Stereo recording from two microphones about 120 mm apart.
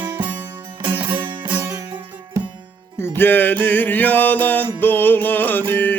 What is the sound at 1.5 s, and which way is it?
Music, 30° right (ahead or behind).